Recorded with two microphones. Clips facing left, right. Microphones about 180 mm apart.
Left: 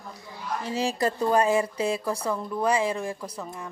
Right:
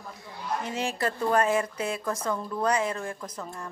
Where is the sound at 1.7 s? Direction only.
30° left (ahead or behind).